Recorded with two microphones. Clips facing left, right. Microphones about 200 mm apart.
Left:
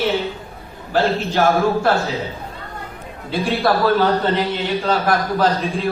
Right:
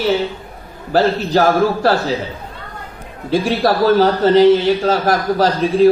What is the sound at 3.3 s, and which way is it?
A man's voice, 40° right (ahead or behind).